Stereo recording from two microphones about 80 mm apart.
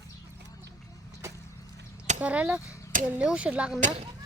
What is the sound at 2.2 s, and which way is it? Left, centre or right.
Speech, centre.